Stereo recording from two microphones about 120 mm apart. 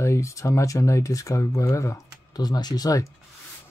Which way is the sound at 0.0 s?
25° left (ahead or behind).